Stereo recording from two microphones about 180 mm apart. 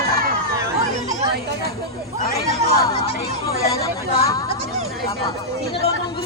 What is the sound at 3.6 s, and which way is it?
Chatter, 20° left (ahead or behind).